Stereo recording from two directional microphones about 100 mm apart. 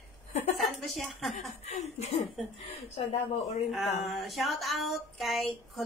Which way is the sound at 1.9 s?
90° left.